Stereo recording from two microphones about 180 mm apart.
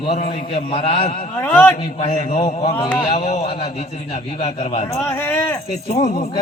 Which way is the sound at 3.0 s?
35° left (ahead or behind).